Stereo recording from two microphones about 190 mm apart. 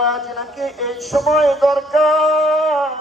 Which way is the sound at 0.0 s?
Centre (ahead or behind).